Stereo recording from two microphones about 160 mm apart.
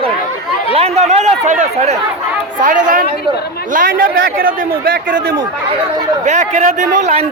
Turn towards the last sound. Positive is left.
turn(degrees=-45)  # may be behind; listen again after turning